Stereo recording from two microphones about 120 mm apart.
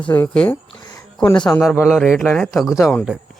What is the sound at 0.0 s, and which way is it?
Speech, 15° left (ahead or behind).